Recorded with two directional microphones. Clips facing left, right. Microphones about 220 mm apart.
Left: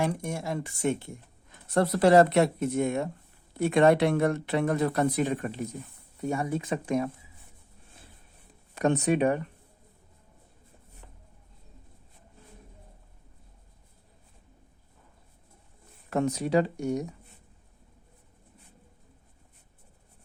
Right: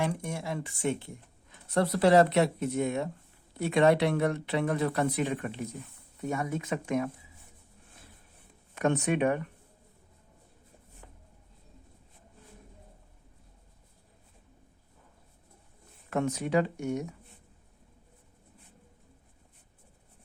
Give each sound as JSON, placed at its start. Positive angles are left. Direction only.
{"t": 0.0, "sound": "speech", "side_deg": 45}
{"t": 8.7, "sound": "speech", "side_deg": 35}
{"t": 16.0, "sound": "speech", "side_deg": 35}